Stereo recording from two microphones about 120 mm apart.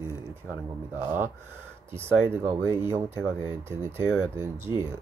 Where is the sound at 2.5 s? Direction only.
20° right (ahead or behind).